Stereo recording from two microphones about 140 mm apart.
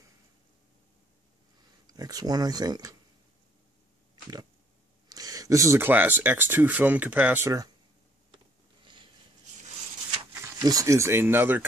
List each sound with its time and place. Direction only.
1.9 s speech: 25° right (ahead or behind)
5.1 s speech: 25° right (ahead or behind)
8.8 s a sound: 35° right (ahead or behind)
10.3 s speech: 25° right (ahead or behind)